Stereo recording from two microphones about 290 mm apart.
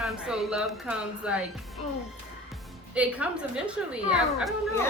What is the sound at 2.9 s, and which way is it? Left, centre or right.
A woman's voice, centre.